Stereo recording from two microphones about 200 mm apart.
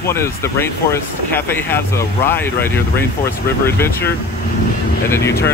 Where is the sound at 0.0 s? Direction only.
15° left (ahead or behind).